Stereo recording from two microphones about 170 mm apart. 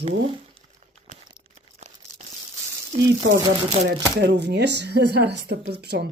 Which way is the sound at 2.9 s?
40° right (ahead or behind).